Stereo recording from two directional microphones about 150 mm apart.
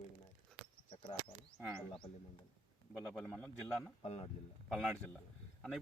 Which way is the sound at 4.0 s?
45° left (ahead or behind).